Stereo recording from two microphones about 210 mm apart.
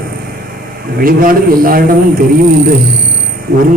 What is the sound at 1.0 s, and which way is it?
Speech, 40° right (ahead or behind).